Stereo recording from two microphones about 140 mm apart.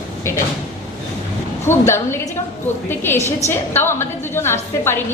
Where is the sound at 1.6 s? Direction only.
20° left (ahead or behind).